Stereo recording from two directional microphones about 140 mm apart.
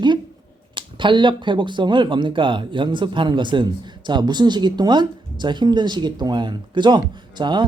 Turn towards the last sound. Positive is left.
turn(degrees=-35)  # may be behind; listen again after turning